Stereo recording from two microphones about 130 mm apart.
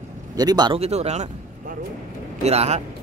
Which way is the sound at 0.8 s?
55° right (ahead or behind).